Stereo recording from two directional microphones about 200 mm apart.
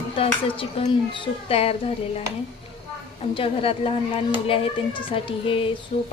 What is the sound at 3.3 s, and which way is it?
Speech, 25° left (ahead or behind).